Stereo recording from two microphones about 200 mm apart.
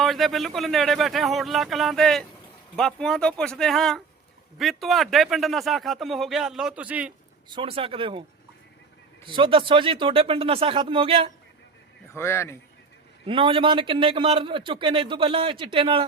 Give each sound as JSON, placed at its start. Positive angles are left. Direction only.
{"t": 0.0, "sound": "a man's voice", "side_deg": 0}
{"t": 7.5, "sound": "a man's voice", "side_deg": -25}
{"t": 9.2, "sound": "a man's voice", "side_deg": -25}
{"t": 12.1, "sound": "speech", "side_deg": 10}
{"t": 13.2, "sound": "a man's voice", "side_deg": -25}